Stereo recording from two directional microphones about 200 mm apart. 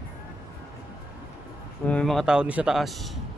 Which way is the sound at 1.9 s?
5° left (ahead or behind).